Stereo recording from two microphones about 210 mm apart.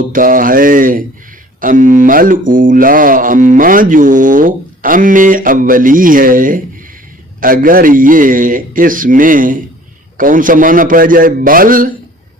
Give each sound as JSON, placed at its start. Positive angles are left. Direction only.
{"t": 0.0, "sound": "speech", "side_deg": -40}